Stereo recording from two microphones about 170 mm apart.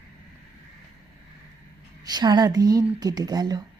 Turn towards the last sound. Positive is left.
turn(degrees=-25)  # may be behind; listen again after turning